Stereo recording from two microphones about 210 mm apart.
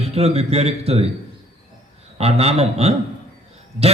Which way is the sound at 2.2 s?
30° right (ahead or behind).